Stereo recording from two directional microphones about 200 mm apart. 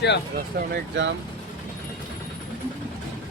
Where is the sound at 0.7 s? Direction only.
65° right (ahead or behind).